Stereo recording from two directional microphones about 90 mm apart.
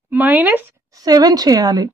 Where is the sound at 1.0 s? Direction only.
45° right (ahead or behind).